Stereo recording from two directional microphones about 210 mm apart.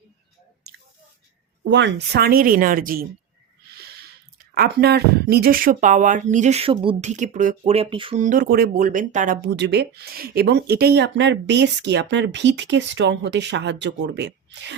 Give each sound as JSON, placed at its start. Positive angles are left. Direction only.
{"t": 0.7, "sound": "squish", "side_deg": -50}
{"t": 1.6, "sound": "a woman's voice", "side_deg": -55}
{"t": 4.5, "sound": "speech", "side_deg": -50}
{"t": 8.2, "sound": "speech", "side_deg": -40}